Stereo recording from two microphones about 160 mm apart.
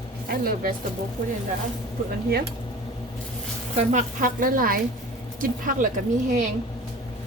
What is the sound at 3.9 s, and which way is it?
Speech, 60° right (ahead or behind).